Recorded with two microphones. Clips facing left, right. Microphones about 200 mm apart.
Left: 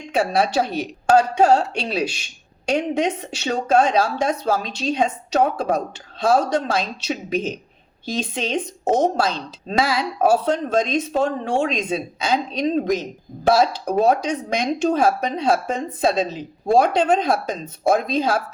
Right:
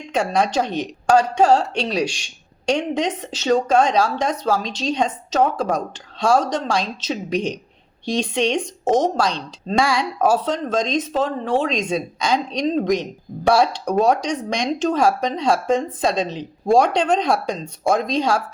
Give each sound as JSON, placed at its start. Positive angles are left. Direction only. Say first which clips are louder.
{"t": 0.1, "sound": "speech", "louder": "even", "side_deg": 5}
{"t": 11.1, "sound": "speech", "louder": "right 1 dB", "side_deg": 50}
{"t": 11.7, "sound": "speech", "louder": "right 2 dB", "side_deg": 5}